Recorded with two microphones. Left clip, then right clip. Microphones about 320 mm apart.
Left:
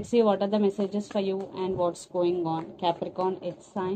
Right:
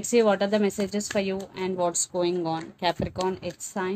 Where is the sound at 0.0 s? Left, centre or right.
Right.